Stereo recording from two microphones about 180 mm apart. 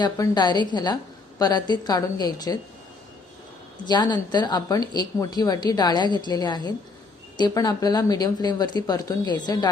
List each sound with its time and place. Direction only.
0.0 s a woman's voice: 25° left (ahead or behind)
3.8 s a woman's voice: 25° left (ahead or behind)